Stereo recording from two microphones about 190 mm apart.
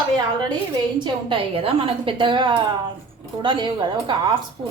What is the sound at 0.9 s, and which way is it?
A woman's voice, 25° right (ahead or behind).